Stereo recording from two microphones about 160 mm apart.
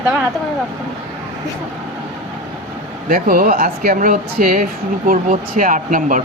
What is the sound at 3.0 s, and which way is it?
Speech, 60° right (ahead or behind).